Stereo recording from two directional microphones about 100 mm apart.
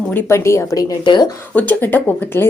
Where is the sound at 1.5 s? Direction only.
15° left (ahead or behind).